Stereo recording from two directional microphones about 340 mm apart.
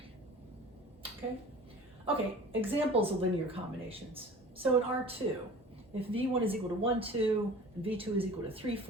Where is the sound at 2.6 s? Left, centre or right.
Centre.